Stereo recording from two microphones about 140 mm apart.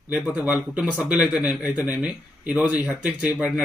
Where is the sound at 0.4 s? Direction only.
5° right (ahead or behind).